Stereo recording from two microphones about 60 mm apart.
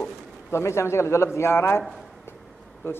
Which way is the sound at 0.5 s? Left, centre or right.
Left.